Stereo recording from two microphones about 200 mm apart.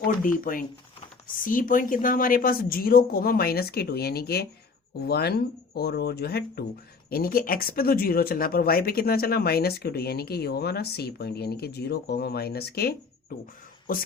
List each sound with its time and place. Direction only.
0.0 s speech: 45° left (ahead or behind)